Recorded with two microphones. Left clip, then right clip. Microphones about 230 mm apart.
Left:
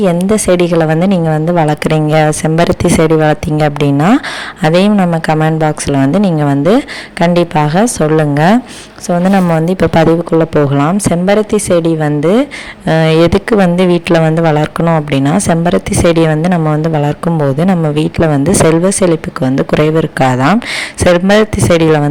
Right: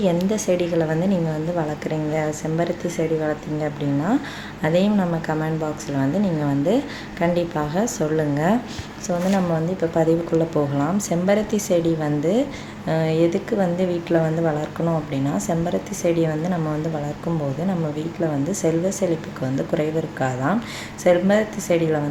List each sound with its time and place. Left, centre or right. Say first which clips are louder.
0.0 s speech: left 10 dB; left